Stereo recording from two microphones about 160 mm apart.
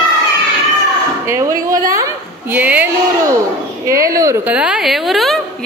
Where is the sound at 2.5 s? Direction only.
10° right (ahead or behind).